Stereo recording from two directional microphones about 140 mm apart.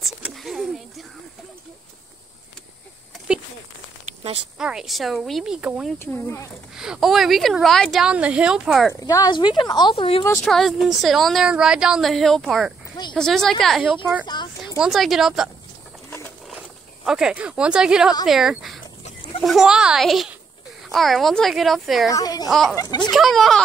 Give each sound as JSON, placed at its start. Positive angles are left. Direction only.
{"t": 0.0, "sound": "a sound", "side_deg": 0}
{"t": 4.6, "sound": "speech", "side_deg": -5}
{"t": 5.9, "sound": "speech", "side_deg": 15}
{"t": 6.8, "sound": "speech", "side_deg": -5}
{"t": 9.0, "sound": "speech", "side_deg": 25}
{"t": 10.4, "sound": "speech", "side_deg": 0}
{"t": 14.2, "sound": "a sound", "side_deg": 30}
{"t": 14.8, "sound": "speech", "side_deg": 0}
{"t": 17.0, "sound": "speech", "side_deg": -5}
{"t": 22.1, "sound": "speech", "side_deg": 25}
{"t": 22.5, "sound": "speech", "side_deg": 0}
{"t": 22.8, "sound": "speech", "side_deg": 30}
{"t": 23.1, "sound": "speech", "side_deg": 0}